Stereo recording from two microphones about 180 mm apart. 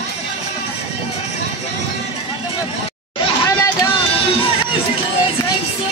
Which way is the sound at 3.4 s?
15° left (ahead or behind).